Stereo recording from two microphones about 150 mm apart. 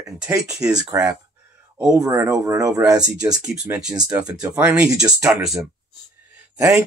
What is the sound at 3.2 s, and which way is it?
Speech, 5° right (ahead or behind).